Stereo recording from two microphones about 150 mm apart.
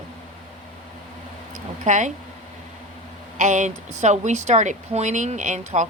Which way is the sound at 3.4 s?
50° right (ahead or behind).